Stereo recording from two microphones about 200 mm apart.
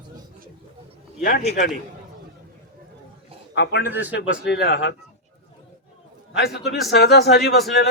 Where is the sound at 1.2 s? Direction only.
50° left (ahead or behind).